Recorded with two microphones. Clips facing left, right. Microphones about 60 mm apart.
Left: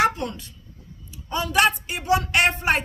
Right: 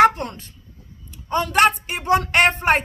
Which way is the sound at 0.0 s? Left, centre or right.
Right.